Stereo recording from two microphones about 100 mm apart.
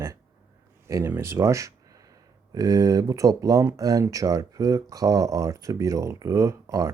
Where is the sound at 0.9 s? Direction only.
30° right (ahead or behind).